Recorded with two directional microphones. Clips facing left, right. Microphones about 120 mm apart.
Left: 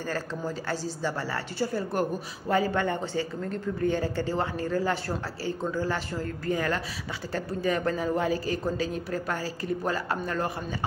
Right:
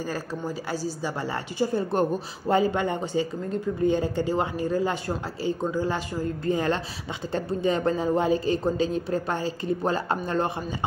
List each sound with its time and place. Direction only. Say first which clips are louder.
0.7 s a woman's voice: right 1 dB; 15° right (ahead or behind)